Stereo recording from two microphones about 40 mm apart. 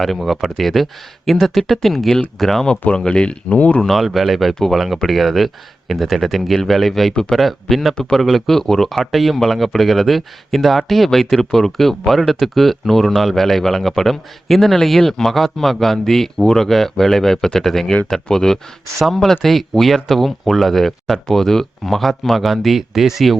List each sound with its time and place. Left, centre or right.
0.3 s speech: centre
2.9 s speech: left
3.8 s speech: centre